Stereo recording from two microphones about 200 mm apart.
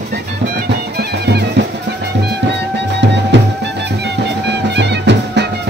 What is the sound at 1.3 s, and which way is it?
Music, 55° right (ahead or behind).